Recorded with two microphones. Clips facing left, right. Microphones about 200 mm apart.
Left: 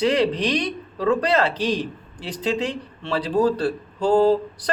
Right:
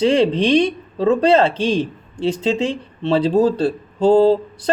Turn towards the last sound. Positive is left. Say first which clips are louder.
# right 3 dB
turn(degrees=-25)  # may be behind; listen again after turning